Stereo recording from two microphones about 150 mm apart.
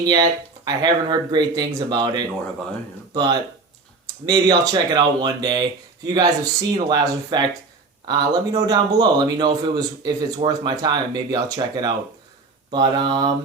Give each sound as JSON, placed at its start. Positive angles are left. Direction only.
{"t": 0.0, "sound": "a man's voice", "side_deg": -25}